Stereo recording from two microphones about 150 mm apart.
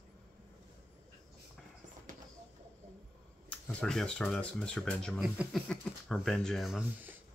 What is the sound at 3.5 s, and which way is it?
Speech, 5° left (ahead or behind).